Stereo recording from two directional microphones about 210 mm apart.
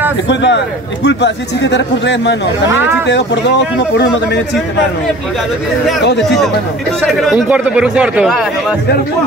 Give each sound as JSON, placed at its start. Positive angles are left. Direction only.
{"t": 0.3, "sound": "a man's voice", "side_deg": 55}
{"t": 7.1, "sound": "a man's voice", "side_deg": 0}